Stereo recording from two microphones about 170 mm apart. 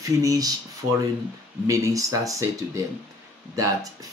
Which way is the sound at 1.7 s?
20° right (ahead or behind).